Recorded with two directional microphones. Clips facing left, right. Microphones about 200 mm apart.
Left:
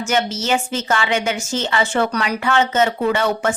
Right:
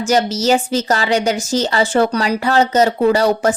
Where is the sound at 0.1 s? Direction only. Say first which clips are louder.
Right 5 dB; 40° right (ahead or behind).